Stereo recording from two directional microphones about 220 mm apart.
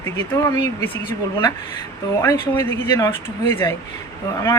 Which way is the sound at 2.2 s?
10° left (ahead or behind).